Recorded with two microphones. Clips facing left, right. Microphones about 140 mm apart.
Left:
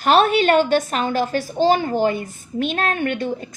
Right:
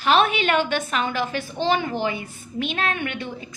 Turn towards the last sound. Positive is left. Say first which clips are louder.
# left 7 dB
turn(degrees=45)  # may be behind; listen again after turning